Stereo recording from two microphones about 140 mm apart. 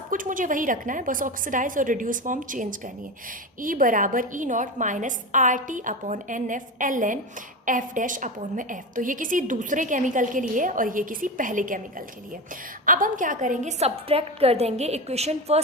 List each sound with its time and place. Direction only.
0.1 s a woman's voice: 75° right (ahead or behind); by 15.6 s 50° right (ahead or behind)